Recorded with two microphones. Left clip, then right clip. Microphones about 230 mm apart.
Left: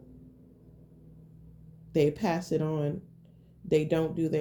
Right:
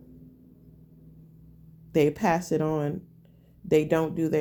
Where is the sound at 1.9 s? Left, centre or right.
Right.